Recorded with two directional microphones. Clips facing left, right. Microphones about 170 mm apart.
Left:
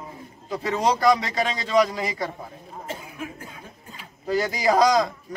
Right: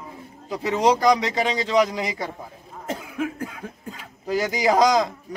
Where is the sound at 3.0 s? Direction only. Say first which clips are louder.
Right 8 dB; 90° right.